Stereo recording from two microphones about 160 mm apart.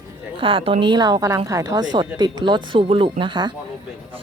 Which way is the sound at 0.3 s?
35° right (ahead or behind).